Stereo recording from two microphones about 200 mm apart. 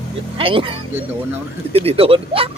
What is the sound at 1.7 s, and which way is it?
Speech, 30° right (ahead or behind).